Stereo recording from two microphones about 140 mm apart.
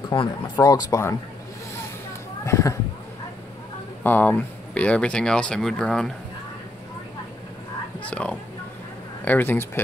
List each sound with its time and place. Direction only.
0.1 s speech: 30° left (ahead or behind)
2.4 s speech: 20° left (ahead or behind)
4.0 s speech: 15° left (ahead or behind)
8.0 s speech: 10° left (ahead or behind)